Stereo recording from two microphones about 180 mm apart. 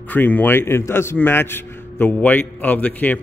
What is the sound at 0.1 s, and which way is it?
A man's voice, 10° left (ahead or behind).